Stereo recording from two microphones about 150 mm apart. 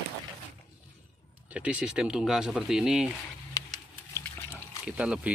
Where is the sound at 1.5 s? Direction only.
10° right (ahead or behind).